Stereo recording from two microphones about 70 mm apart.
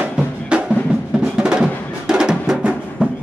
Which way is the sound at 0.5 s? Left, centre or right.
Centre.